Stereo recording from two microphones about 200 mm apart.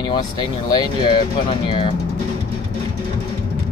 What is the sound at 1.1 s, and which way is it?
Speech, 25° left (ahead or behind).